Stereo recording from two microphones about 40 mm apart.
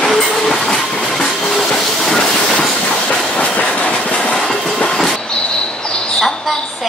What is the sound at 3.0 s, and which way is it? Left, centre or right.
Train, left.